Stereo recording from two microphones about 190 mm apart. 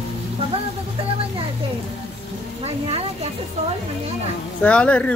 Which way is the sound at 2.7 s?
35° right (ahead or behind).